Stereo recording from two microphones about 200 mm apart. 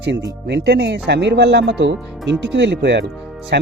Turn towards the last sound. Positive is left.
turn(degrees=-60)  # may be behind; listen again after turning